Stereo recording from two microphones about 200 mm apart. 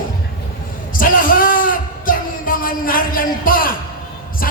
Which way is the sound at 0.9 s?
45° left (ahead or behind).